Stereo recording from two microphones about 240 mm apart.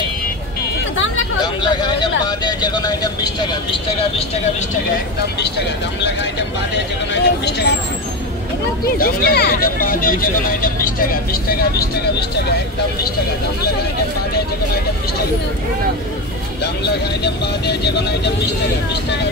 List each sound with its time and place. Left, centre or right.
1.4 s speech: centre
7.2 s speech: left
8.8 s speech: left
17.2 s speech: left